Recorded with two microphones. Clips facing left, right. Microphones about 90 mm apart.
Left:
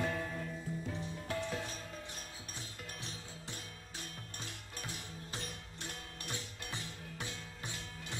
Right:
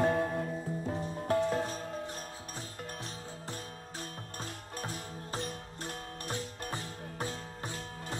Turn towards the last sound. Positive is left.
turn(degrees=-40)  # may be behind; listen again after turning